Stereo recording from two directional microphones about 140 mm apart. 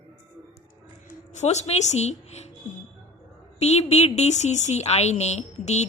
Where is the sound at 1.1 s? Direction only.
55° left (ahead or behind).